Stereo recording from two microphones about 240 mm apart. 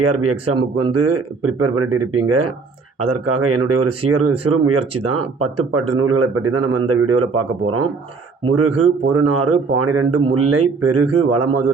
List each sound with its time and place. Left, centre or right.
0.0 s speech: right